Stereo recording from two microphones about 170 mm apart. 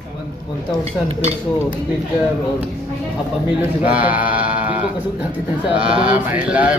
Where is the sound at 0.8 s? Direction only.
35° right (ahead or behind).